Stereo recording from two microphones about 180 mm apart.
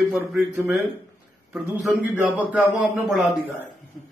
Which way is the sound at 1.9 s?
10° right (ahead or behind).